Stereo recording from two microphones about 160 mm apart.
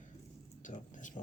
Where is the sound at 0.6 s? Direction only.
50° left (ahead or behind).